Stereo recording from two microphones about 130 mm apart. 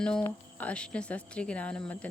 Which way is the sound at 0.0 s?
5° left (ahead or behind).